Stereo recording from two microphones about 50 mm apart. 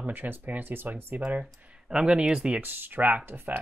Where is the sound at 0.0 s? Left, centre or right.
Right.